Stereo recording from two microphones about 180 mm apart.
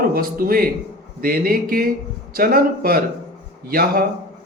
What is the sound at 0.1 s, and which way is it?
A man's voice, 55° right (ahead or behind).